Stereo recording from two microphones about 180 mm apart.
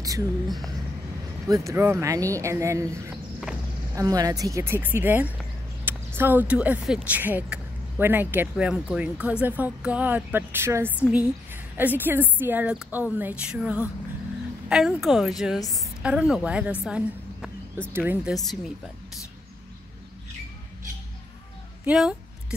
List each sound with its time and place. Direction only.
1.5 s a woman's voice: 15° right (ahead or behind)
16.8 s a sound: centre (ahead or behind)
17.9 s speech: 10° right (ahead or behind)
18.3 s a woman's voice: centre (ahead or behind)
21.8 s a woman's voice: 5° right (ahead or behind)